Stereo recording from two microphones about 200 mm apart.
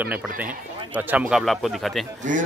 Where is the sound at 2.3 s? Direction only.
40° right (ahead or behind).